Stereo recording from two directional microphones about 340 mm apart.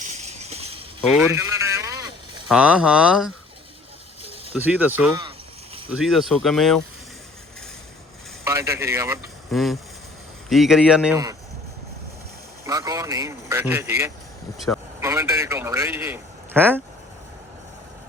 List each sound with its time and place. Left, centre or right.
0.0 s a sound: centre
1.1 s speech: centre
4.5 s speech: centre
8.4 s speech: centre
12.6 s a man's voice: centre